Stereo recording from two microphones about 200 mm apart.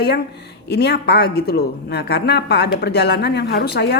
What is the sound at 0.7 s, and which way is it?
A woman's voice, 55° left (ahead or behind).